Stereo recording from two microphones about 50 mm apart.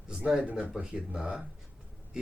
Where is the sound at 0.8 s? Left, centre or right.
Centre.